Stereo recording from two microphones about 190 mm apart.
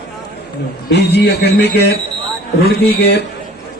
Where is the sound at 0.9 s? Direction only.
60° left (ahead or behind).